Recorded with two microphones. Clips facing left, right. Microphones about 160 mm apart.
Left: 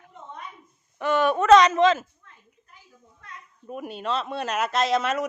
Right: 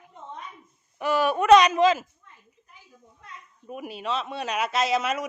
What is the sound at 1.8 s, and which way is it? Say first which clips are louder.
Speech: left 1 dB; 5° right (ahead or behind).